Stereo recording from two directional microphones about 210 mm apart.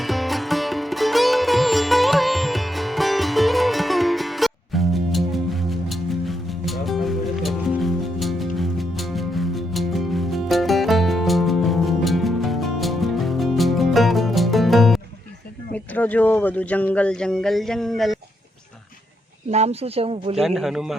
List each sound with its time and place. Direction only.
0.0 s music: centre (ahead or behind)
15.7 s speech: 5° left (ahead or behind)
19.5 s speech: 30° right (ahead or behind)
20.3 s speech: centre (ahead or behind)